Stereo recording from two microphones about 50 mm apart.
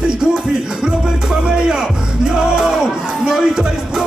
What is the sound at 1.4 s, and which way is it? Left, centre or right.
Speech, centre.